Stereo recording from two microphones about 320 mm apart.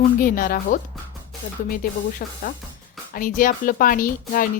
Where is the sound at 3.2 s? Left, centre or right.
Left.